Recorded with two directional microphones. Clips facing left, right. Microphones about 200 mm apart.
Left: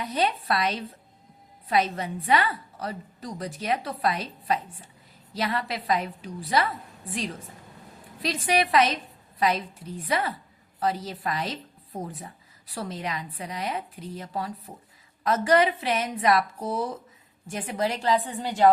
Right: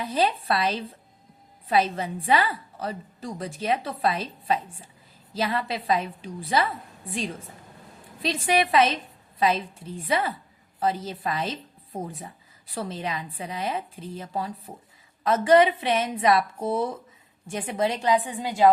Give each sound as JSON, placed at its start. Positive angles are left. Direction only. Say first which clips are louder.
{"t": 0.0, "sound": "a woman's voice", "louder": "right 2 dB", "side_deg": -30}
{"t": 8.4, "sound": "a woman's voice", "louder": "right 1 dB", "side_deg": -25}
{"t": 12.7, "sound": "a woman's voice", "louder": "right 2 dB", "side_deg": -25}